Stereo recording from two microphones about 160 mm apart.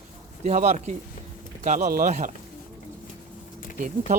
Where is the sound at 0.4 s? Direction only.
45° right (ahead or behind).